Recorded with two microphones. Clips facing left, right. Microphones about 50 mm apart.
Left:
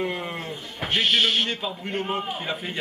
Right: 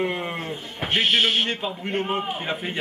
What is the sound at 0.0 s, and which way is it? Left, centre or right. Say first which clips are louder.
A man's voice: right 2 dB; centre.